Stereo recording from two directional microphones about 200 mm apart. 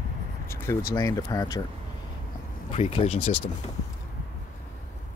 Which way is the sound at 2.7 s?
30° left (ahead or behind).